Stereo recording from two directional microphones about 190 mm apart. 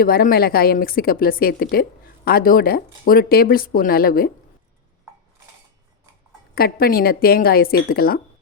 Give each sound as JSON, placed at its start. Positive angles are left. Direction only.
{"t": 0.0, "sound": "a woman's voice", "side_deg": 50}
{"t": 6.5, "sound": "a woman's voice", "side_deg": 50}